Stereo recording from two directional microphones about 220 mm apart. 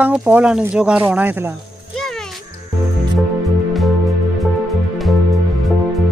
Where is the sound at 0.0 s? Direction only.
5° right (ahead or behind).